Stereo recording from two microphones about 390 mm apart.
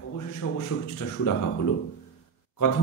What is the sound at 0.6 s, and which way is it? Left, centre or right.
Speech, left.